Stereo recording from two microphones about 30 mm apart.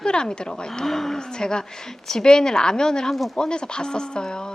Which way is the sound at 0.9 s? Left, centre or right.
Centre.